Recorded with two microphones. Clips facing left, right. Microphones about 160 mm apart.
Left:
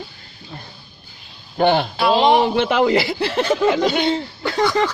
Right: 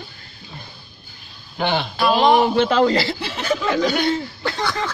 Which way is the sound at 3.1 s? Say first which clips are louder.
Left 9 dB; 60° left (ahead or behind).